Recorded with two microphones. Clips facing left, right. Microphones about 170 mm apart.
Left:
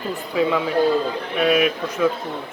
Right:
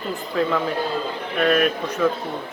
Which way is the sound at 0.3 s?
5° left (ahead or behind).